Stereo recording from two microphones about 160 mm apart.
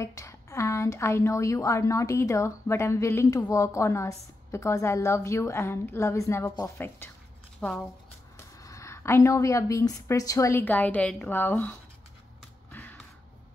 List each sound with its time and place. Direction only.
0.0 s a woman's voice: 20° left (ahead or behind)
7.6 s speech: centre (ahead or behind)
8.4 s a woman's voice: 20° left (ahead or behind)
12.7 s finger snapping: 10° left (ahead or behind)